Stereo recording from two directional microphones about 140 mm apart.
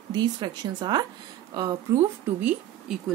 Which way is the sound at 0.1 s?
30° right (ahead or behind).